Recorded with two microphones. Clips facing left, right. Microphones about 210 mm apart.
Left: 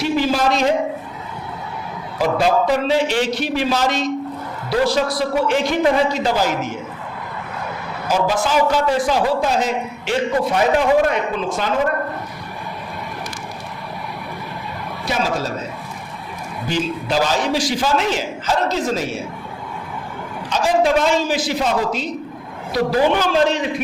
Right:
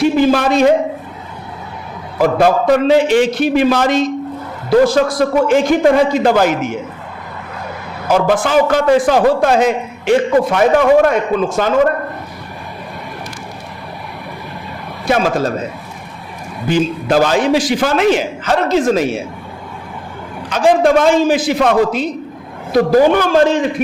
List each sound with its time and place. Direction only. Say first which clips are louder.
0.0 s a man's voice: right 6 dB; 50° right (ahead or behind)
2.1 s a man's voice: right 5 dB; 55° right (ahead or behind)
8.0 s a man's voice: right 5 dB; 60° right (ahead or behind)
15.0 s a man's voice: right 7 dB; 55° right (ahead or behind)
16.6 s a man's voice: right 7 dB; 55° right (ahead or behind)
20.5 s a man's voice: right 5 dB; 55° right (ahead or behind)
22.7 s a man's voice: right 7 dB; 45° right (ahead or behind)